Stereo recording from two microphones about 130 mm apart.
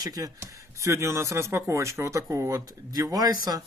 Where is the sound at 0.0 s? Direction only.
30° right (ahead or behind).